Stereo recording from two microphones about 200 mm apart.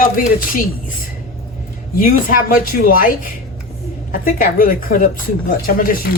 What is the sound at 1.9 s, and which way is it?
Speech, 45° left (ahead or behind).